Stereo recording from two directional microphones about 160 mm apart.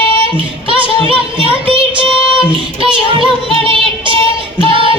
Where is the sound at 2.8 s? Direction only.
30° right (ahead or behind).